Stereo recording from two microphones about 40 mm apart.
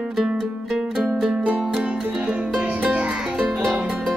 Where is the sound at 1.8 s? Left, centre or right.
Centre.